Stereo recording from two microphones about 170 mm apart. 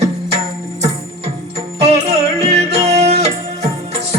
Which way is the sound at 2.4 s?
40° right (ahead or behind).